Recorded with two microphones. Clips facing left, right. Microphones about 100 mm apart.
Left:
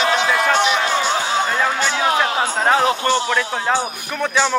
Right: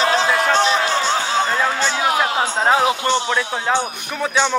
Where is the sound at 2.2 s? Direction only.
15° right (ahead or behind).